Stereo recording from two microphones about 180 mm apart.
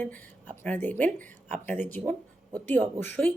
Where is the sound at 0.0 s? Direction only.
10° left (ahead or behind).